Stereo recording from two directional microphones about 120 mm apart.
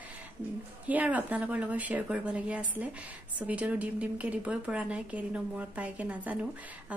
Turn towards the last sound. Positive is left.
turn(degrees=-10)  # may be behind; listen again after turning